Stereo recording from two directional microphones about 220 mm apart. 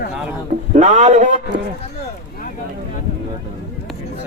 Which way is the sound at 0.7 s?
30° right (ahead or behind).